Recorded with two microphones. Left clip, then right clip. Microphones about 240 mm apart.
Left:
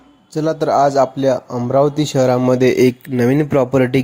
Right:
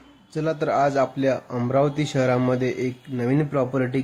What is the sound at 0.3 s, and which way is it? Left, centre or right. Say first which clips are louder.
Speech: left 7 dB; centre.